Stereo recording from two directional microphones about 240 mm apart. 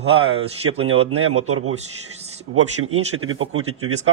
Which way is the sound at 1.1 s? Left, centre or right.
Right.